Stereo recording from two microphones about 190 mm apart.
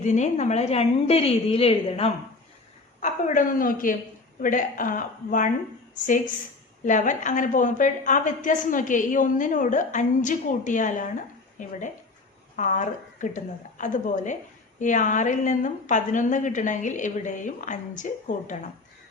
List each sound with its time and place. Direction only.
0.0 s a woman's voice: 40° left (ahead or behind)
3.0 s a woman's voice: 40° left (ahead or behind)